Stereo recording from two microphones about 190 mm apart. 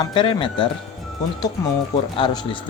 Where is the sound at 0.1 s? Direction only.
25° left (ahead or behind).